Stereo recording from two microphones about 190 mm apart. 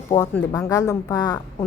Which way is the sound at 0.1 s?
25° left (ahead or behind).